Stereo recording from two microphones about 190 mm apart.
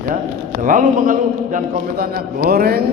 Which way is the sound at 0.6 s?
45° right (ahead or behind).